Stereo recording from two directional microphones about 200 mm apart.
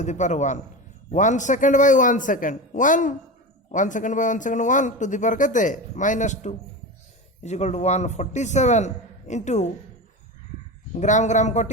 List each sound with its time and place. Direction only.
0.0 s speech: 35° left (ahead or behind)
10.9 s speech: 35° left (ahead or behind)